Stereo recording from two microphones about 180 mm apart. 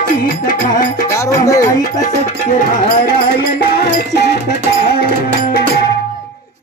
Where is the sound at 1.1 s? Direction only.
20° left (ahead or behind).